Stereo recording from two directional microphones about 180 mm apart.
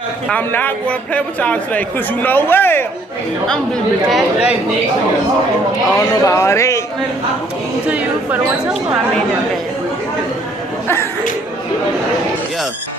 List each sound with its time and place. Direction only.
0.3 s a man's voice: 10° left (ahead or behind)
4.1 s speech: 5° right (ahead or behind)
5.9 s a man's voice: 15° left (ahead or behind)